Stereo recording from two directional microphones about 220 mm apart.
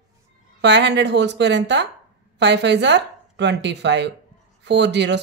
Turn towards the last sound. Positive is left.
turn(degrees=-55)  # may be behind; listen again after turning